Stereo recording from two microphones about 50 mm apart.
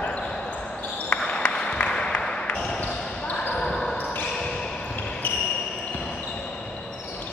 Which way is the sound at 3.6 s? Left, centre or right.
Centre.